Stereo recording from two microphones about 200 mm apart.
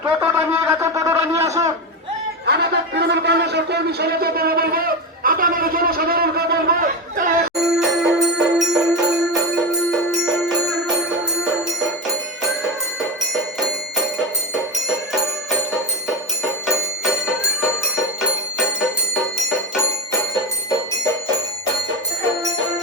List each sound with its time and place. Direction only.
0.0 s shofar: 10° right (ahead or behind)
2.5 s a sound: 55° right (ahead or behind)
7.5 s music: centre (ahead or behind)
12.6 s music: centre (ahead or behind)
18.8 s bell: centre (ahead or behind)